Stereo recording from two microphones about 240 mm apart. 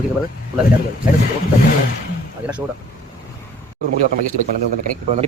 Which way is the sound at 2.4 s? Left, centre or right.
Centre.